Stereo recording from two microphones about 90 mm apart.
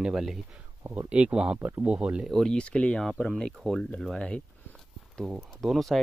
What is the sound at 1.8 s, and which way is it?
Speech, 10° right (ahead or behind).